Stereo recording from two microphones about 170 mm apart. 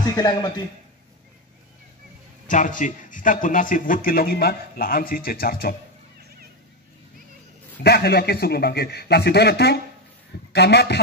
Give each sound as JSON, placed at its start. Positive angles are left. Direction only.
{"t": 0.0, "sound": "a man's voice", "side_deg": 20}
{"t": 2.4, "sound": "speech", "side_deg": 50}
{"t": 7.8, "sound": "a man's voice", "side_deg": 70}